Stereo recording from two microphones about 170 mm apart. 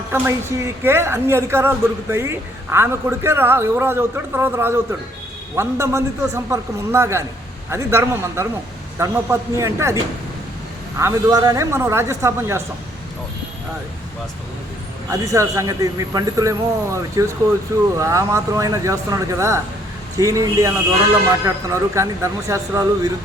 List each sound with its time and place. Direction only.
0.1 s a woman's voice: 15° right (ahead or behind)
15.1 s a man's voice: 20° right (ahead or behind)